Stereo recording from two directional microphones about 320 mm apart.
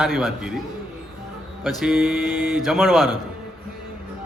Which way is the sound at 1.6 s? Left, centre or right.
Centre.